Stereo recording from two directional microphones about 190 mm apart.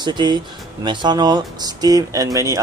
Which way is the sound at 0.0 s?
25° right (ahead or behind).